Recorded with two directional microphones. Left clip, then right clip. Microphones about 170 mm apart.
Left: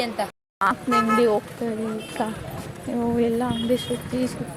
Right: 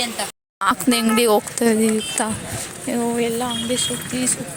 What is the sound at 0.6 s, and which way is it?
Speech, 35° right (ahead or behind).